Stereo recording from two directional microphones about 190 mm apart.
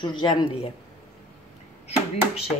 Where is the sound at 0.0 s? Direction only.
25° left (ahead or behind).